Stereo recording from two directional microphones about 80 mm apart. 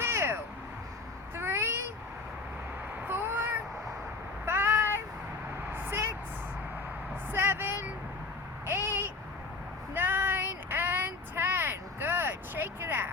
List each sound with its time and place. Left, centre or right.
0.0 s vehicle: right
1.4 s a sound: right
3.1 s cat: right
4.4 s meow: right
5.7 s vehicle: right
7.3 s a sound: right
8.6 s babbling: right
9.9 s child singing: right